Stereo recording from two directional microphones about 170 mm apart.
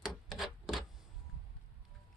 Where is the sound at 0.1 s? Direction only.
Centre (ahead or behind).